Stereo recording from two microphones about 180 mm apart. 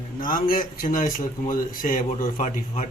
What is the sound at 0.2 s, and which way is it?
A man's voice, 50° left (ahead or behind).